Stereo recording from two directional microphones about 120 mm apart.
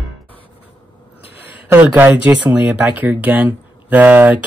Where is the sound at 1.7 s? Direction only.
20° right (ahead or behind).